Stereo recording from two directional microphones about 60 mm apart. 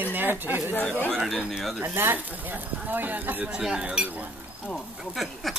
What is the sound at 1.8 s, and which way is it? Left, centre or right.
Speech, right.